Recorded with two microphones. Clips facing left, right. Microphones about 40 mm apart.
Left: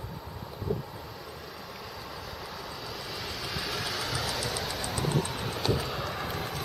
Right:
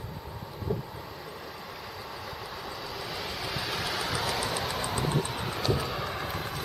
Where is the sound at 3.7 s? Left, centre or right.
Right.